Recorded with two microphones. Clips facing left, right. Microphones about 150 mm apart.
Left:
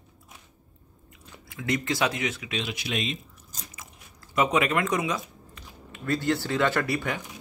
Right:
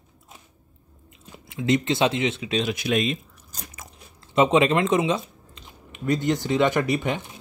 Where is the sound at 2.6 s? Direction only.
50° right (ahead or behind).